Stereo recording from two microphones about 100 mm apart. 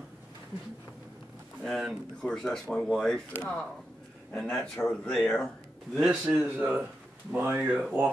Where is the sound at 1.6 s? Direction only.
Centre (ahead or behind).